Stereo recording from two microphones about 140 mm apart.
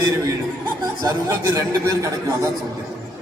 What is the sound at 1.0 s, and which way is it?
A man's voice, 25° right (ahead or behind).